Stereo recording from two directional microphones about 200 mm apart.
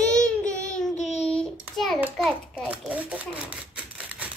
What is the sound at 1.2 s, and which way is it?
Child singing, 5° left (ahead or behind).